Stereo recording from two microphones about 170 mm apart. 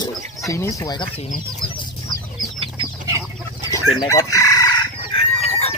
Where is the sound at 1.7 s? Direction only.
25° left (ahead or behind).